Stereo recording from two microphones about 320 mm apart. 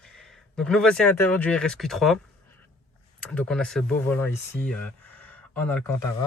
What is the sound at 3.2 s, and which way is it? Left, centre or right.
Speech, centre.